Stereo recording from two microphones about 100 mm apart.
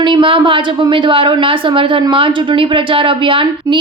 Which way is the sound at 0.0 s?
55° right (ahead or behind).